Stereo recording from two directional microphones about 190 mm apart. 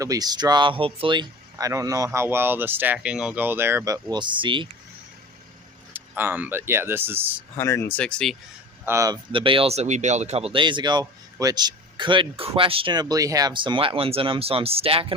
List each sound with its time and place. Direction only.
0.0 s speech: 20° right (ahead or behind)
5.9 s speech: 10° right (ahead or behind)
7.5 s speech: 15° left (ahead or behind)
8.8 s speech: 15° right (ahead or behind); by 15.0 s 30° right (ahead or behind)